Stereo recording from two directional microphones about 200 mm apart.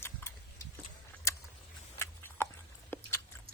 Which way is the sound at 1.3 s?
15° left (ahead or behind).